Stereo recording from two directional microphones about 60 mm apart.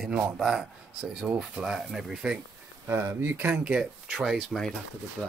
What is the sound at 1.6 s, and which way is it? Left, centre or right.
Speech, centre.